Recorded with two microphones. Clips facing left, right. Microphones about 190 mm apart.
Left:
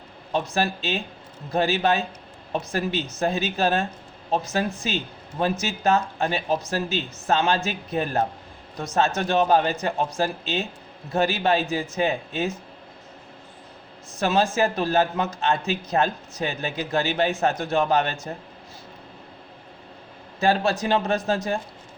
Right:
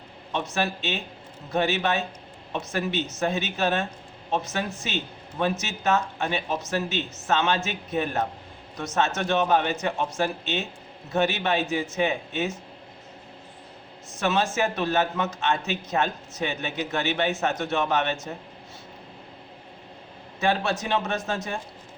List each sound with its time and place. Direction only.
0.3 s a man's voice: 35° left (ahead or behind)
14.2 s a man's voice: 35° left (ahead or behind)
20.4 s a man's voice: 35° left (ahead or behind)